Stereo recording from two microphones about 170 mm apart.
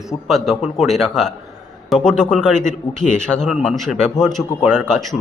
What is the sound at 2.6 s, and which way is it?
Speech, 45° left (ahead or behind).